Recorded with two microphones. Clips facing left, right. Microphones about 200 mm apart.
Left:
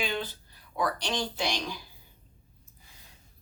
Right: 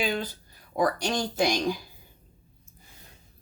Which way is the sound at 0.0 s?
40° right (ahead or behind).